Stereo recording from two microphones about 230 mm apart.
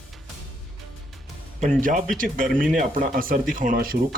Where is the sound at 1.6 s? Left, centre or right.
Right.